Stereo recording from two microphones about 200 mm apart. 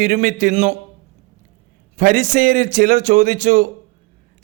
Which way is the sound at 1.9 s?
40° right (ahead or behind).